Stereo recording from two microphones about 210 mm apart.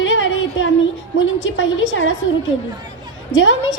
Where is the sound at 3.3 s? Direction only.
65° left (ahead or behind).